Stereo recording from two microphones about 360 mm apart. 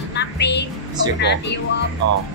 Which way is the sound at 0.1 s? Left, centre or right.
Left.